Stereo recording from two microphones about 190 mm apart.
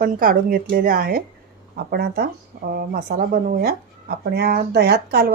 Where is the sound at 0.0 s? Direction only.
50° right (ahead or behind).